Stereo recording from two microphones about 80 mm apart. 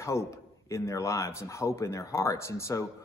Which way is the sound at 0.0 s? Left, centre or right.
Left.